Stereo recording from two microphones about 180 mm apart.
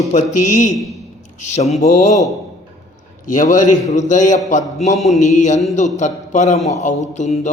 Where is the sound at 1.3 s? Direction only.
40° left (ahead or behind).